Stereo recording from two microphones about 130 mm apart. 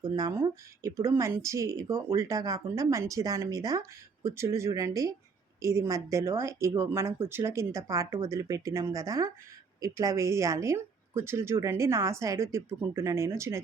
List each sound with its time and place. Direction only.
0.0 s speech: 25° right (ahead or behind)